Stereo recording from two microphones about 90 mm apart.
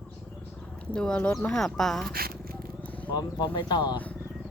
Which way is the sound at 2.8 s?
15° left (ahead or behind).